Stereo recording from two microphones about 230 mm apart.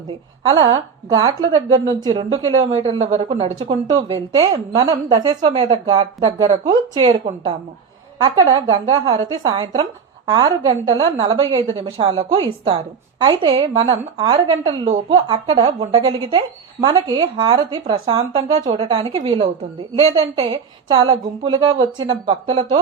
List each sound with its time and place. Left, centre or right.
1.2 s a woman's voice: centre